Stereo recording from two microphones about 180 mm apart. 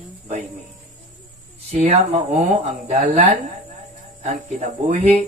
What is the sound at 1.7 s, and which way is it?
Speech, 35° right (ahead or behind).